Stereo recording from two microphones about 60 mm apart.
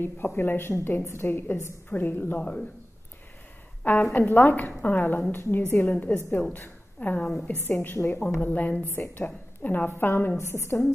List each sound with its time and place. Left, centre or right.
0.0 s a woman's voice: left
3.8 s a woman's voice: left
5.8 s a woman's voice: left
8.8 s a woman's voice: left
9.2 s a woman's voice: left
9.8 s a woman's voice: left
10.3 s a woman's voice: left